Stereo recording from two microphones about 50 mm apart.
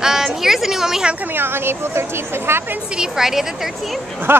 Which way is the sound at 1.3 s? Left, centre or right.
Right.